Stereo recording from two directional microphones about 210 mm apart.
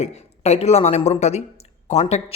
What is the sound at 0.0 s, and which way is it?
A woman's voice, 30° left (ahead or behind).